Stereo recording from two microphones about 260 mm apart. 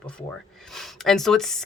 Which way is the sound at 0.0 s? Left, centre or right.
Centre.